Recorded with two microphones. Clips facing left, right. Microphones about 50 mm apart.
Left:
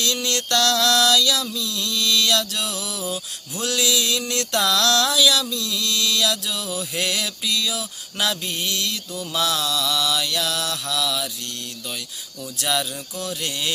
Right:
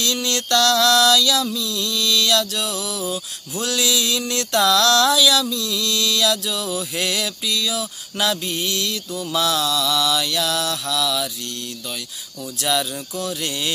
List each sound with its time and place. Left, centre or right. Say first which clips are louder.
0.0 s mantra: right 1 dB; centre
0.5 s mantra: right 3 dB; centre
1.5 s music: right 2 dB; centre
2.3 s mantra: right 2 dB; centre
5.8 s music: right 1 dB; left
6.1 s mantra: right 3 dB; centre
12.6 s mantra: right 2 dB; centre